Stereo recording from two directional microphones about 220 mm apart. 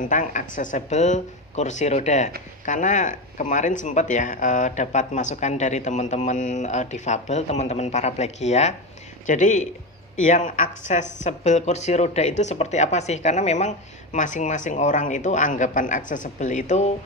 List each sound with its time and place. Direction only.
0.0 s speech: 35° left (ahead or behind)